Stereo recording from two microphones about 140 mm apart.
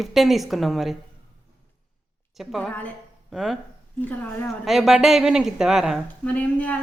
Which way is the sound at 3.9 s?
10° left (ahead or behind).